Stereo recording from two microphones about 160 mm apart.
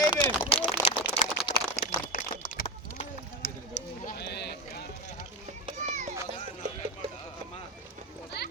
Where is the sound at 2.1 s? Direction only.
60° left (ahead or behind).